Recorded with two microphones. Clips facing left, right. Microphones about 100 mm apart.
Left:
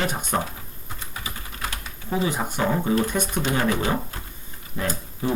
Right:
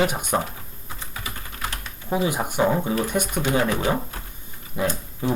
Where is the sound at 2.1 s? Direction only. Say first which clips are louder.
Right 2 dB; 15° right (ahead or behind).